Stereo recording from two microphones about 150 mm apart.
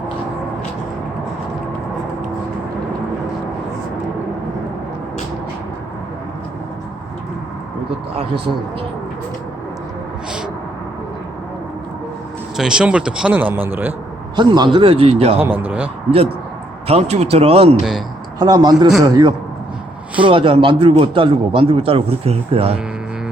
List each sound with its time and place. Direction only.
12.5 s speech: 5° right (ahead or behind)
14.3 s a man's voice: 30° right (ahead or behind)
15.4 s speech: 15° right (ahead or behind)
16.8 s speech: 45° right (ahead or behind)
18.3 s a man's voice: 30° right (ahead or behind)